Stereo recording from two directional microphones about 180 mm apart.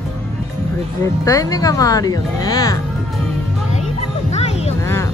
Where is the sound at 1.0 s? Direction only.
20° left (ahead or behind).